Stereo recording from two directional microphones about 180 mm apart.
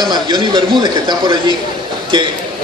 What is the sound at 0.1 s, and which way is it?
A man's voice, 25° right (ahead or behind).